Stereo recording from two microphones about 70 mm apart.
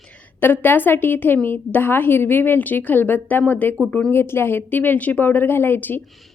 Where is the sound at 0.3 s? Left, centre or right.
Left.